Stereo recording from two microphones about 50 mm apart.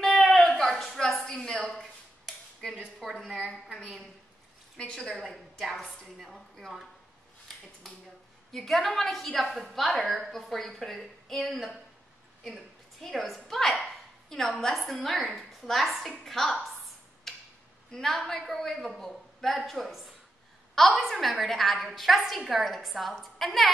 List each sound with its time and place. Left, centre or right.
0.0 s a sound: centre
3.0 s a woman's voice: centre
3.4 s a woman's voice: centre
5.3 s a woman's voice: centre
8.5 s a woman's voice: centre
13.0 s a woman's voice: centre
17.3 s tick-tock: centre
17.9 s a woman's voice: centre